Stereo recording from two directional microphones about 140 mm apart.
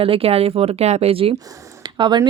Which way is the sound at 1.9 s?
35° right (ahead or behind).